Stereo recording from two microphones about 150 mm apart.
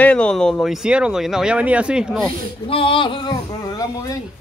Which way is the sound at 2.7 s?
35° left (ahead or behind).